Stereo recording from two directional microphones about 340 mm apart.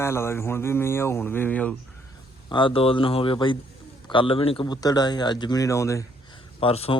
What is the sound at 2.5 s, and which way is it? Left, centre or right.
A man's voice, centre.